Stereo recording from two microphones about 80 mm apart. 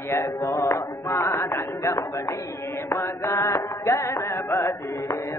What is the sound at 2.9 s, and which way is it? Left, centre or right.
Music, left.